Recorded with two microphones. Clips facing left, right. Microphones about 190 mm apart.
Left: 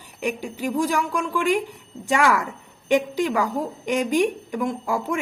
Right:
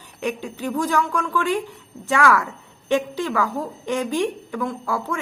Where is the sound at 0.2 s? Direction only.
10° left (ahead or behind).